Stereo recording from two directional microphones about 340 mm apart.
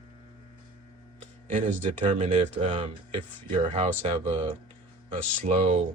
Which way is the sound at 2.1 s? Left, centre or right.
Centre.